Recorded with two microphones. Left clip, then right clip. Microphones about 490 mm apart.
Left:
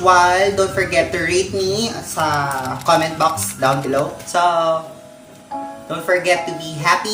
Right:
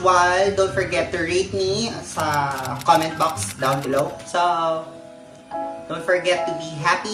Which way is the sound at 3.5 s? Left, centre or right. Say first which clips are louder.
Left 1 dB; right.